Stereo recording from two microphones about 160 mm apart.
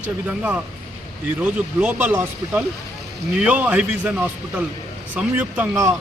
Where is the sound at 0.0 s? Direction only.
10° right (ahead or behind).